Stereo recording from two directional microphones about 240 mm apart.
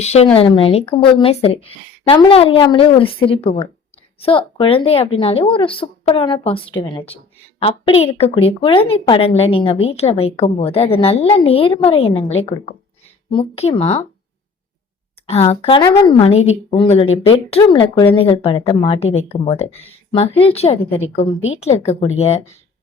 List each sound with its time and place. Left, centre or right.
0.0 s a woman's voice: left
15.3 s a woman's voice: left